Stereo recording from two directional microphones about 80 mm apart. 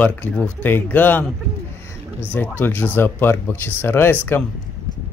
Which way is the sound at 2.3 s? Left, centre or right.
Left.